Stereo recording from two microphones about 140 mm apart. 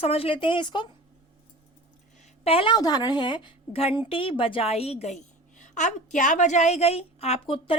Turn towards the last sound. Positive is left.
turn(degrees=40)  # may be behind; listen again after turning